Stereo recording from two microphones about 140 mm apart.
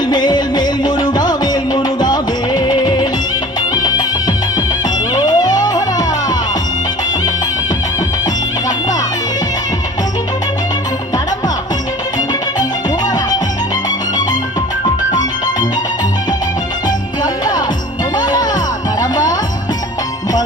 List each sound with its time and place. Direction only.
0.1 s music: 30° left (ahead or behind)
18.2 s music: 25° left (ahead or behind)